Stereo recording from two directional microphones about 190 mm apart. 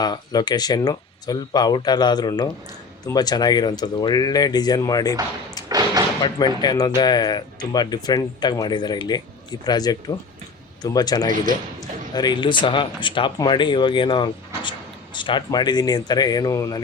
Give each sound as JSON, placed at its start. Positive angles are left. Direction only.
{"t": 0.0, "sound": "speech", "side_deg": 20}
{"t": 5.6, "sound": "slam", "side_deg": -20}
{"t": 6.2, "sound": "speech", "side_deg": 20}